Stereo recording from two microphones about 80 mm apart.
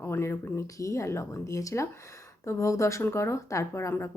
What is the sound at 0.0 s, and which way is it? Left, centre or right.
Speech, left.